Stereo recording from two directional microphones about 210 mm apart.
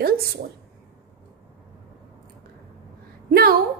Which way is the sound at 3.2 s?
45° right (ahead or behind).